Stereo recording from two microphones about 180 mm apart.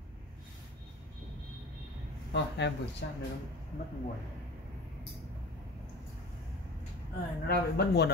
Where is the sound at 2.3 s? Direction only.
75° left (ahead or behind).